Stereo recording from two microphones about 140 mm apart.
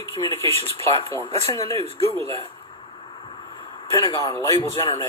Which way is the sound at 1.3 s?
45° right (ahead or behind).